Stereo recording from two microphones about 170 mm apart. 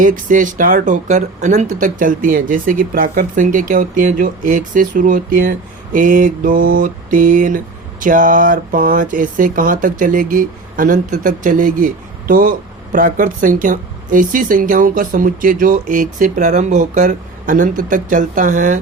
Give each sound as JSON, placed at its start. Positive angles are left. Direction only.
{"t": 0.0, "sound": "speech", "side_deg": -50}